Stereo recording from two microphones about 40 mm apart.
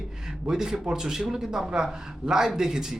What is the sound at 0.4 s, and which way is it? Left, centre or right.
A man's voice, centre.